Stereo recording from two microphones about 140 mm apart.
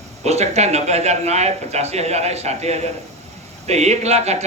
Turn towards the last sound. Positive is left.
turn(degrees=-50)  # may be behind; listen again after turning